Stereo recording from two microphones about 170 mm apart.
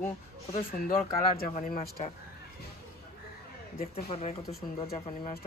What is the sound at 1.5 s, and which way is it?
Speech, 45° left (ahead or behind).